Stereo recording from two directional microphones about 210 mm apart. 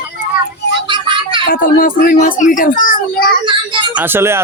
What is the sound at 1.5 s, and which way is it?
Speech, 40° left (ahead or behind).